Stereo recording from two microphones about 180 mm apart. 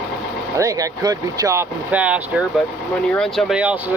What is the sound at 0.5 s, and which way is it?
Speech, 20° right (ahead or behind).